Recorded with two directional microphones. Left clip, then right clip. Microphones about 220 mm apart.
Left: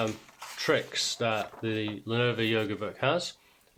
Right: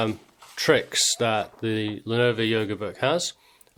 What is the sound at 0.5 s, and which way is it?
Speech, 45° right (ahead or behind).